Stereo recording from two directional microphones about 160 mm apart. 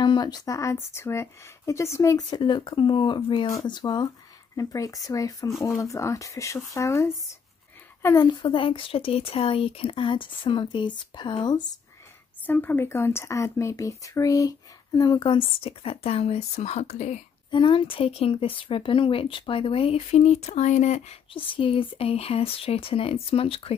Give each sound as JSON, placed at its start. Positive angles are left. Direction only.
{"t": 0.0, "sound": "speech", "side_deg": 30}
{"t": 12.4, "sound": "speech", "side_deg": 10}
{"t": 17.5, "sound": "speech", "side_deg": 30}
{"t": 21.5, "sound": "speech", "side_deg": 35}